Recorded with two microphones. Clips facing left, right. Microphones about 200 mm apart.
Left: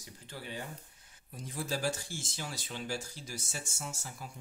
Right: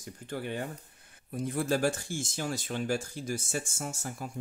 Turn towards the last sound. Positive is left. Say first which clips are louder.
# right 6 dB
turn(degrees=-50)  # may be behind; listen again after turning